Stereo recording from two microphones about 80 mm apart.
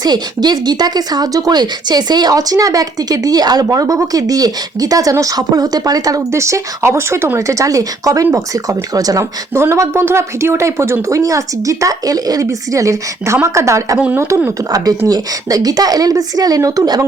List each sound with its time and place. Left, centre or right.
0.0 s speech: right
9.6 s speech: right
14.7 s speech: right